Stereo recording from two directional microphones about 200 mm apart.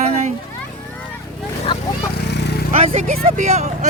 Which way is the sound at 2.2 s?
55° left (ahead or behind).